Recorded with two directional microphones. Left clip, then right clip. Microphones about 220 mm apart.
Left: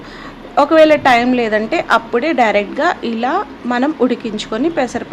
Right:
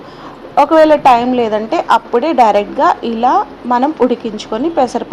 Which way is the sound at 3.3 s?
10° left (ahead or behind).